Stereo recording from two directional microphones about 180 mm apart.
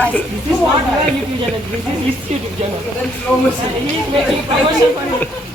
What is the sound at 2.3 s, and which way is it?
Speech, 40° right (ahead or behind).